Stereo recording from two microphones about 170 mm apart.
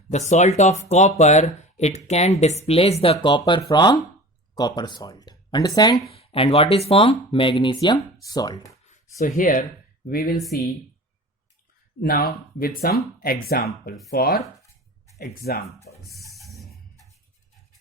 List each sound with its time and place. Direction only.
0.1 s speech: 40° left (ahead or behind); by 8.7 s 25° left (ahead or behind)
8.9 s speech: 45° left (ahead or behind)
11.9 s speech: 60° left (ahead or behind)
14.3 s a sound: 20° left (ahead or behind)
15.2 s speech: 65° left (ahead or behind)
16.0 s music: centre (ahead or behind)